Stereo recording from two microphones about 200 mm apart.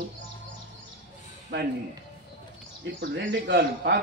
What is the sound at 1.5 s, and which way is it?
Speech, 65° right (ahead or behind).